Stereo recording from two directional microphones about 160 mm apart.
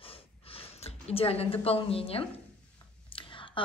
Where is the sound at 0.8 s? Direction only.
40° left (ahead or behind).